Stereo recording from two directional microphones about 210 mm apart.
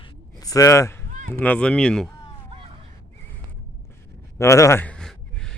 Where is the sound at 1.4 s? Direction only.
5° left (ahead or behind).